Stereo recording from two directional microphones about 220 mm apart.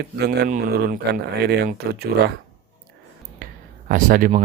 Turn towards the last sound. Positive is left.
turn(degrees=-40)  # may be behind; listen again after turning